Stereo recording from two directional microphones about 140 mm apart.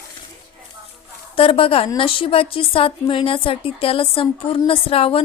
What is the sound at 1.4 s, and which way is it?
A woman's voice, 40° left (ahead or behind).